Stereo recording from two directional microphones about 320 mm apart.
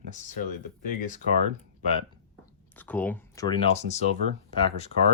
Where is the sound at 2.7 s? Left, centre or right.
Centre.